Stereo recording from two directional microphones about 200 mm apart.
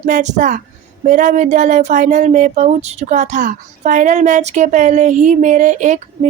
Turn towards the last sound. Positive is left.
turn(degrees=-35)  # may be behind; listen again after turning